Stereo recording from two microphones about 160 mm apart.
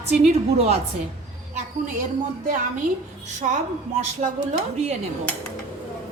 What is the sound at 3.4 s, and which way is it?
Speech, 50° right (ahead or behind).